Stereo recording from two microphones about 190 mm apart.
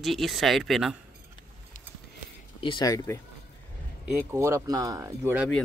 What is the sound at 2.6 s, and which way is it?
Speech, 25° left (ahead or behind).